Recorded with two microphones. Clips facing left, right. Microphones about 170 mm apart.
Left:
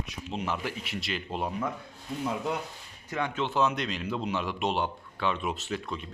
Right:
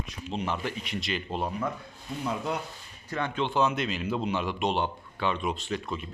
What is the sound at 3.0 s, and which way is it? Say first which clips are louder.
A man's voice: right 1 dB; 10° left (ahead or behind).